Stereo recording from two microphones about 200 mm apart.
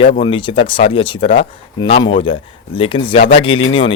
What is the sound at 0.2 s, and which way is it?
A man's voice, 25° left (ahead or behind).